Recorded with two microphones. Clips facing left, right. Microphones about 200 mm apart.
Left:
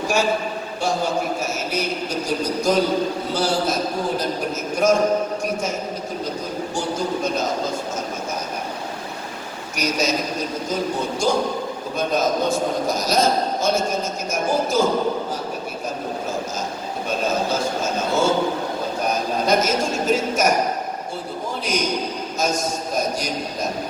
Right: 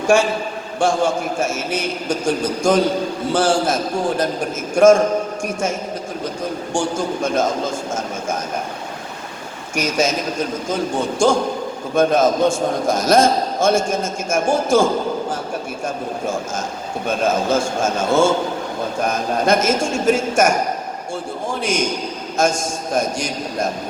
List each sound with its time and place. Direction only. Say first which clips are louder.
0.8 s a man's voice: right 5 dB; 50° right (ahead or behind)
6.7 s a man's voice: right 3 dB; 50° right (ahead or behind)
9.7 s a man's voice: right 3 dB; 50° right (ahead or behind)
15.8 s a sound: right 3 dB; 50° right (ahead or behind)
17.1 s a man's voice: right 4 dB; 50° right (ahead or behind)
21.6 s a man's voice: right 1 dB; 50° right (ahead or behind)